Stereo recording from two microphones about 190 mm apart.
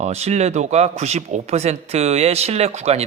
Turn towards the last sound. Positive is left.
turn(degrees=-35)  # may be behind; listen again after turning